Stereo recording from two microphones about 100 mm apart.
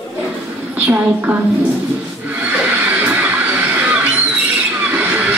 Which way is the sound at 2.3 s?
15° right (ahead or behind).